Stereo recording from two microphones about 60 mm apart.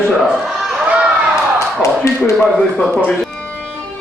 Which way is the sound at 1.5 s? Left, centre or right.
Left.